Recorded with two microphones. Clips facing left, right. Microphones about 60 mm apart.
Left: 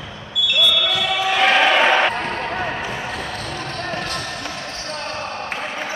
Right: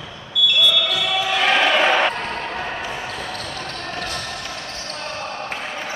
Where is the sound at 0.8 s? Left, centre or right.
Centre.